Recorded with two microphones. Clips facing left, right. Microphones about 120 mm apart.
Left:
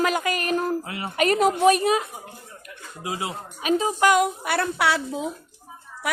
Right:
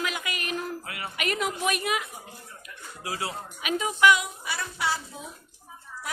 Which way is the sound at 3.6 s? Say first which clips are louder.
Left 3 dB; 35° left (ahead or behind).